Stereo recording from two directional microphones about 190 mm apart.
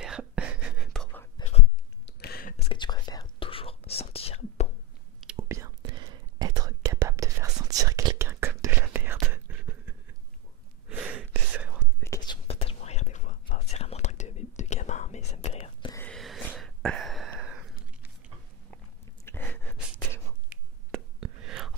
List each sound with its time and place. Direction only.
0.0 s whispering: 5° right (ahead or behind)
1.1 s whispering: 15° left (ahead or behind)
2.0 s a sound: 55° left (ahead or behind)
2.5 s whispering: 25° left (ahead or behind)
5.2 s whispering: 10° right (ahead or behind)
11.8 s whispering: 15° left (ahead or behind); by 13.6 s 45° left (ahead or behind)
13.7 s whispering: 35° left (ahead or behind)
15.9 s a sound: 10° left (ahead or behind)
16.2 s a sound: centre (ahead or behind)
19.2 s whispering: 10° left (ahead or behind)
20.9 s whispering: centre (ahead or behind)